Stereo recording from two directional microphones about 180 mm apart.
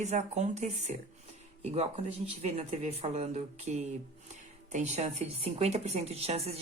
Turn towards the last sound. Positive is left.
turn(degrees=-35)  # may be behind; listen again after turning